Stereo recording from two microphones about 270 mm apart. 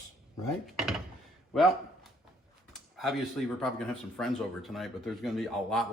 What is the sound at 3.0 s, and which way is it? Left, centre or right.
Speech, centre.